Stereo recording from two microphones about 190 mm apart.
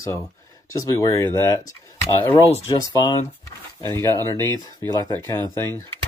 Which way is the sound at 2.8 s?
20° left (ahead or behind).